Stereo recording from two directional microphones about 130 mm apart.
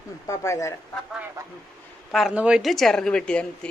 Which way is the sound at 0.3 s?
25° left (ahead or behind).